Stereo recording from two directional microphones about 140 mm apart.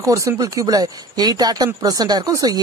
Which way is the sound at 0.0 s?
20° right (ahead or behind).